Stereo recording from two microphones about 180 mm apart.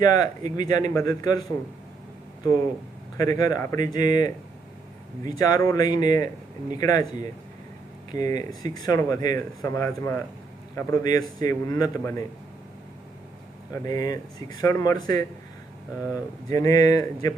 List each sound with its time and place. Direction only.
0.0 s speech: 20° left (ahead or behind)
3.2 s speech: 20° left (ahead or behind)
13.7 s speech: 20° left (ahead or behind)